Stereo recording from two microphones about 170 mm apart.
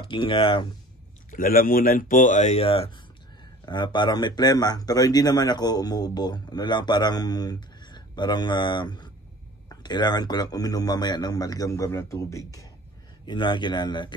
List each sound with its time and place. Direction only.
0.0 s speech: 30° left (ahead or behind)
1.3 s speech: 55° left (ahead or behind); by 14.1 s 25° left (ahead or behind)